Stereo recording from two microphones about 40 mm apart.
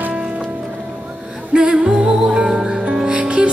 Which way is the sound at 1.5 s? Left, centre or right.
Centre.